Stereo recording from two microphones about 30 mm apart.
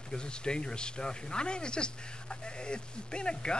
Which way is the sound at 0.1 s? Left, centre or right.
Left.